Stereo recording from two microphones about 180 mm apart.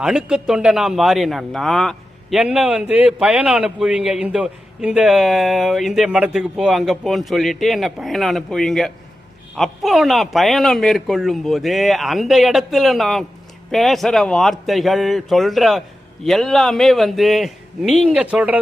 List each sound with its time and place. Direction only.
0.0 s a man's voice: 5° right (ahead or behind)